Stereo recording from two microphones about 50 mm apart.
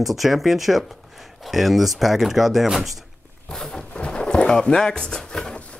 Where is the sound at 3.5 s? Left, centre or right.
Centre.